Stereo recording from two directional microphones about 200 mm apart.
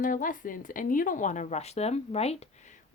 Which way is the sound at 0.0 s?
40° left (ahead or behind).